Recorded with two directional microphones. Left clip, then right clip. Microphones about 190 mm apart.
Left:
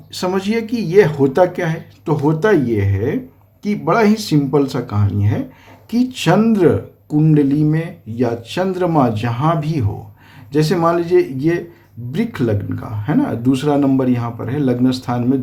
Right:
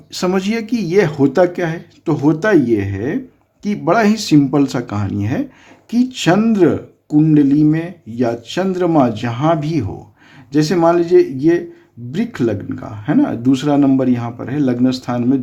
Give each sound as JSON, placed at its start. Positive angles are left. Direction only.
{"t": 0.1, "sound": "speech", "side_deg": -30}
{"t": 5.9, "sound": "speech", "side_deg": -25}